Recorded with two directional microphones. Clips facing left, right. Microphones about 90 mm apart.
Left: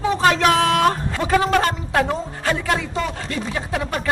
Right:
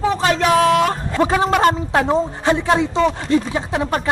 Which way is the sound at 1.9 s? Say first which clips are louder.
Right 4 dB; 25° right (ahead or behind).